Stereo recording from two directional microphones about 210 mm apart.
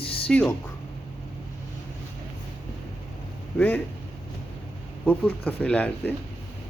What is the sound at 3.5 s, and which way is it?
Speech, 10° left (ahead or behind).